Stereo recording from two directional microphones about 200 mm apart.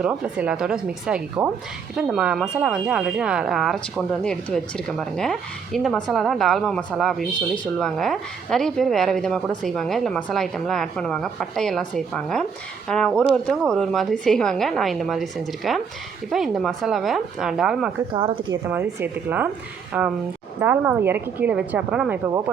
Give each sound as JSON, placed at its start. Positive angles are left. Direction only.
{"t": 0.0, "sound": "speech", "side_deg": -5}
{"t": 18.1, "sound": "speech", "side_deg": -20}
{"t": 18.7, "sound": "a woman's voice", "side_deg": -10}